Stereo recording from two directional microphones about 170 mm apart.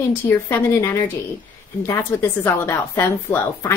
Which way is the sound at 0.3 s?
15° left (ahead or behind).